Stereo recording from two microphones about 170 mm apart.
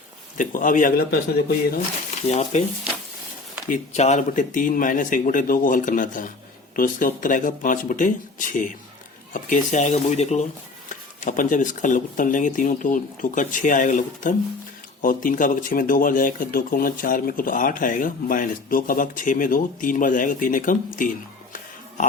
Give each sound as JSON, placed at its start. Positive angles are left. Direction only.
{"t": 0.3, "sound": "speech", "side_deg": 50}
{"t": 2.2, "sound": "speech", "side_deg": 40}
{"t": 3.7, "sound": "speech", "side_deg": 40}